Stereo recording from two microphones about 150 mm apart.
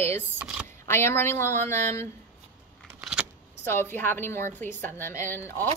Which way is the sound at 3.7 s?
15° left (ahead or behind).